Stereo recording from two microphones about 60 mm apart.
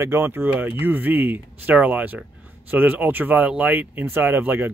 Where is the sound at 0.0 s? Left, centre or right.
Right.